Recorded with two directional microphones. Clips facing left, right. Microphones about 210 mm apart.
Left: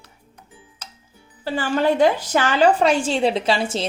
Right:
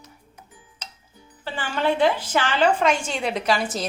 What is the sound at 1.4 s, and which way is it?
A woman's voice, 40° left (ahead or behind).